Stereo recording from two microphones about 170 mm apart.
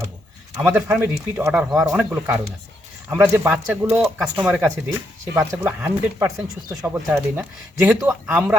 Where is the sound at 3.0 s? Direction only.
15° right (ahead or behind).